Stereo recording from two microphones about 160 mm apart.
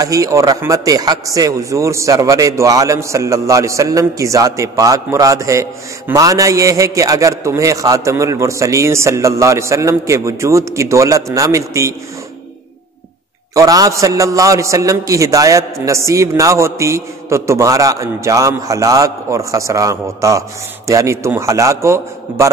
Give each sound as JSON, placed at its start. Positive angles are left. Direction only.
{"t": 0.0, "sound": "a man's voice", "side_deg": -20}
{"t": 13.6, "sound": "a man's voice", "side_deg": -20}